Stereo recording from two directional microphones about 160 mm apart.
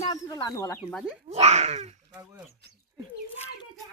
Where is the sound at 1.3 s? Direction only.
45° right (ahead or behind).